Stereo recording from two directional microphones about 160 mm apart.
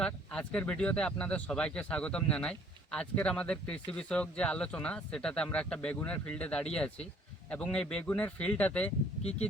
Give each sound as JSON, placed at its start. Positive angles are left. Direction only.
{"t": 0.0, "sound": "speech", "side_deg": 5}